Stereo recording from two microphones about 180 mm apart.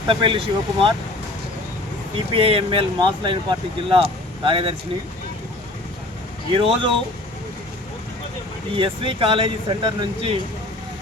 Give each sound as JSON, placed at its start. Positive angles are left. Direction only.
{"t": 0.1, "sound": "speech", "side_deg": -30}
{"t": 2.1, "sound": "speech", "side_deg": -30}
{"t": 6.5, "sound": "speech", "side_deg": -30}
{"t": 8.7, "sound": "speech", "side_deg": -30}